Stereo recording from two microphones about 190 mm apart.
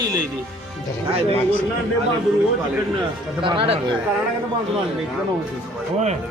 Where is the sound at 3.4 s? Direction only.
25° right (ahead or behind).